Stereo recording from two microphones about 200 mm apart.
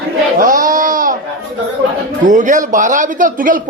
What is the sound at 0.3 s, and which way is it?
Sheep, 45° right (ahead or behind).